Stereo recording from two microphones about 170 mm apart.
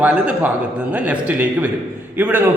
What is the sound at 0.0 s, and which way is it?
A man's voice, 10° right (ahead or behind).